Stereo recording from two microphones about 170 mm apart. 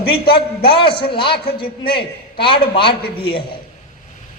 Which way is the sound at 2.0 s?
30° left (ahead or behind).